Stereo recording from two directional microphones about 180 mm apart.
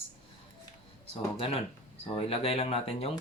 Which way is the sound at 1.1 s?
30° left (ahead or behind).